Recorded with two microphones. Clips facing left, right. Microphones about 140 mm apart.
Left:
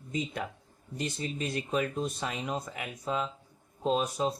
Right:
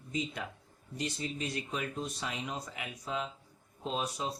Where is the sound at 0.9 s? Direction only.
50° left (ahead or behind).